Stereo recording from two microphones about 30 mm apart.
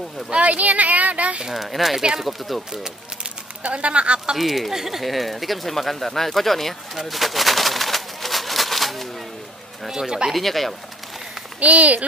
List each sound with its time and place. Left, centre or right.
0.3 s speech: right
1.5 s speech: centre
3.6 s speech: right
4.4 s speech: centre
5.0 s speech: centre
7.1 s a sound: centre
9.8 s speech: centre
10.3 s speech: centre
11.6 s speech: right